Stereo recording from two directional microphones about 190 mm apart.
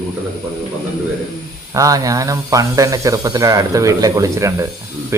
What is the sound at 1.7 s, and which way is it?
Speech, 20° right (ahead or behind).